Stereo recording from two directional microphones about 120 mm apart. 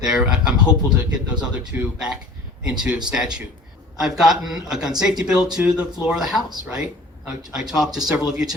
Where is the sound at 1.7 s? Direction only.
15° right (ahead or behind).